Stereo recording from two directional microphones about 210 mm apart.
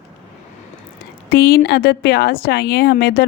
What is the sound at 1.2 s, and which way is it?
Speech, 50° left (ahead or behind).